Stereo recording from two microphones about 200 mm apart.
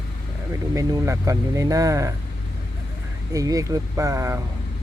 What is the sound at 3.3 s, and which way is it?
Speech, 15° right (ahead or behind).